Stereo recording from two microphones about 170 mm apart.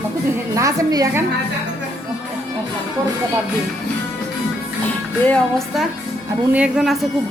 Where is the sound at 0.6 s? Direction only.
20° right (ahead or behind).